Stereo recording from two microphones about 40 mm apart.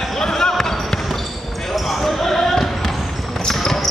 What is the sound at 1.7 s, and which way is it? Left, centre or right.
Basketball bounce, centre.